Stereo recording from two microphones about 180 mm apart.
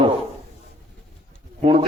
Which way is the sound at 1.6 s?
30° right (ahead or behind).